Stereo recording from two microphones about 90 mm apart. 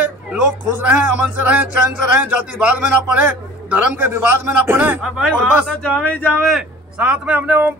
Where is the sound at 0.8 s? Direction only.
15° right (ahead or behind).